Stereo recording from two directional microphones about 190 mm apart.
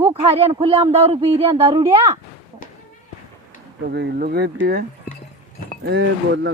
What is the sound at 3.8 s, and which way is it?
Speech, 55° right (ahead or behind).